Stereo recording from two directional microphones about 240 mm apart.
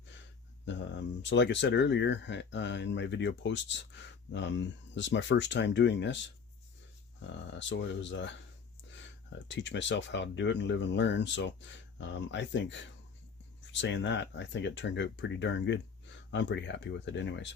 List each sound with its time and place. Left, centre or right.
1.2 s speech: left
9.5 s speech: left